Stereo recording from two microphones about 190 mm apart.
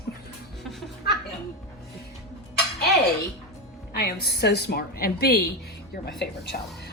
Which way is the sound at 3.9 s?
55° left (ahead or behind).